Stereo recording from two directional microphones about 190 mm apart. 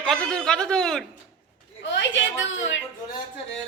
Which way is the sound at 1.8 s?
70° left (ahead or behind).